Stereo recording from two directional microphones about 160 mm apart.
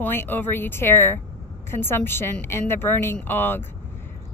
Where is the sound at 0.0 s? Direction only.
15° left (ahead or behind).